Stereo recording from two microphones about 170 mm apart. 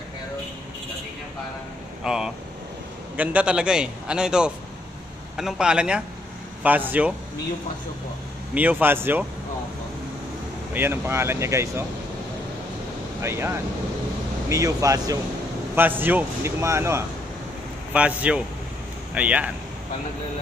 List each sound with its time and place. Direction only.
2.0 s a man's voice: 5° right (ahead or behind)
8.5 s speech: 10° right (ahead or behind)
10.7 s speech: 10° right (ahead or behind)
13.2 s speech: 15° right (ahead or behind)